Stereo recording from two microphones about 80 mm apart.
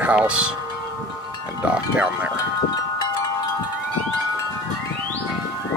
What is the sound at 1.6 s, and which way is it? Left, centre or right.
Speech, centre.